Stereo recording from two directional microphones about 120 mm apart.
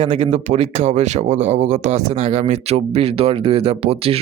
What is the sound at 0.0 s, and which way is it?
Speech, 55° right (ahead or behind).